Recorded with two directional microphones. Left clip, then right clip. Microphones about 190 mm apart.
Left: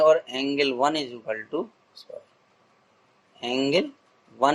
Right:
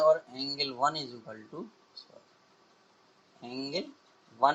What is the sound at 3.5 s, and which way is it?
Speech, 30° left (ahead or behind).